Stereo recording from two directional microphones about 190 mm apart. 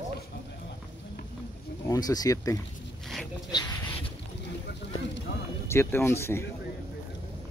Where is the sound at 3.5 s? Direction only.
20° left (ahead or behind).